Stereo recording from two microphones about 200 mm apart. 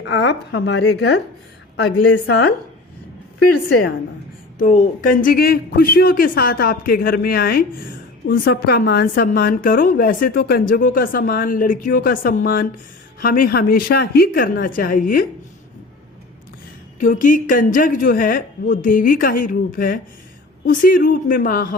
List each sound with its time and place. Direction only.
0.0 s a woman's voice: 65° left (ahead or behind)
3.7 s a woman's voice: 50° left (ahead or behind)
17.0 s a woman's voice: 40° left (ahead or behind)